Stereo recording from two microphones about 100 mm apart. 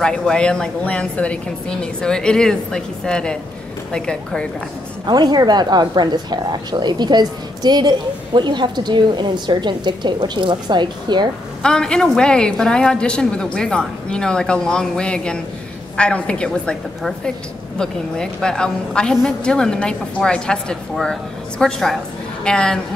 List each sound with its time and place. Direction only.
0.0 s a woman's voice: 5° left (ahead or behind)
5.0 s speech: 45° right (ahead or behind)
11.6 s a woman's voice: 10° left (ahead or behind)